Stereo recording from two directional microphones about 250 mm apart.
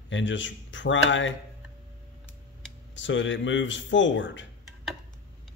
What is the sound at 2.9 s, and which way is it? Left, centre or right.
Speech, left.